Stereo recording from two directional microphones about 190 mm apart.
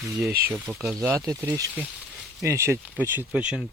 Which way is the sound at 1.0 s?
15° right (ahead or behind).